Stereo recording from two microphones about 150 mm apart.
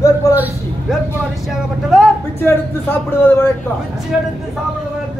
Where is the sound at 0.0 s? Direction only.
25° left (ahead or behind).